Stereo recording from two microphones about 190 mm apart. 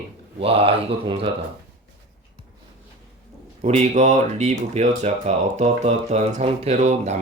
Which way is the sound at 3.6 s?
35° right (ahead or behind).